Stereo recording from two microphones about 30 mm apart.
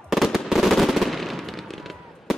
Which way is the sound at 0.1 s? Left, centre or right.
Centre.